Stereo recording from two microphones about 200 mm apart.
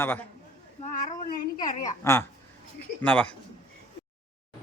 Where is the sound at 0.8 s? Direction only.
35° left (ahead or behind).